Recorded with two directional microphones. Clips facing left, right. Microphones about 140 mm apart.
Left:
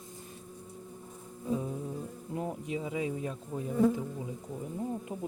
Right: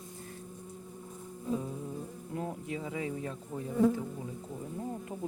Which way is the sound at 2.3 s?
20° left (ahead or behind).